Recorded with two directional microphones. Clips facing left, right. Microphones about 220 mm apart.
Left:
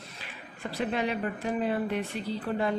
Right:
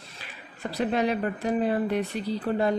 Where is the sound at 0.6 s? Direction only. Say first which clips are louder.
Right 4 dB; 40° right (ahead or behind).